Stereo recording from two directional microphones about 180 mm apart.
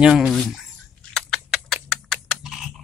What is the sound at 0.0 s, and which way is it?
Speech, 5° right (ahead or behind).